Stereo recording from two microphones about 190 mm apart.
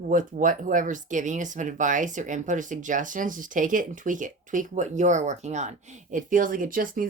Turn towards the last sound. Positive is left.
turn(degrees=-45)  # may be behind; listen again after turning